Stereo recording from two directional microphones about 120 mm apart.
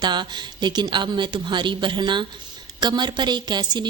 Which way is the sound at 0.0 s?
40° right (ahead or behind).